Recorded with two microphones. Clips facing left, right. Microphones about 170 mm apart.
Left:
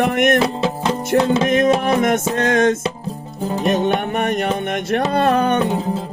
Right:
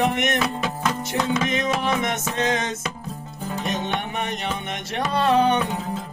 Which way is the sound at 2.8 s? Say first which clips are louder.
Left 7 dB; 30° left (ahead or behind).